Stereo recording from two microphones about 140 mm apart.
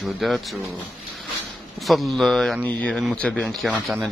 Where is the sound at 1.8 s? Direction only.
Centre (ahead or behind).